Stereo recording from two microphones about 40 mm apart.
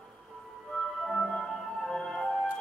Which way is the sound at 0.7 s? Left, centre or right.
Centre.